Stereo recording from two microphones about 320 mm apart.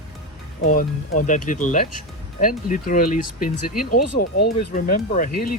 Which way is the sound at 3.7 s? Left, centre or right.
Left.